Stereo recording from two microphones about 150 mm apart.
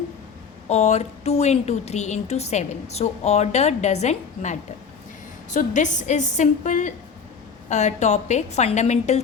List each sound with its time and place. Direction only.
0.7 s a woman's voice: 50° left (ahead or behind)